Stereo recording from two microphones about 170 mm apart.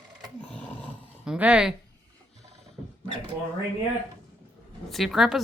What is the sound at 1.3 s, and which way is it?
Speech, 5° right (ahead or behind).